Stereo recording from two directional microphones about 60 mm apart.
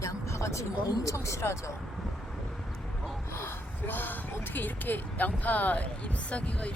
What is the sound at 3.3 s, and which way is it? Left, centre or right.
Speech, left.